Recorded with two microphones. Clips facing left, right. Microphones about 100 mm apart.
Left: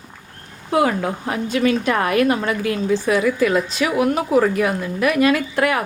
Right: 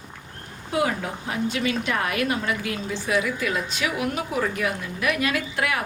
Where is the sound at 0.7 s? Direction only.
60° left (ahead or behind).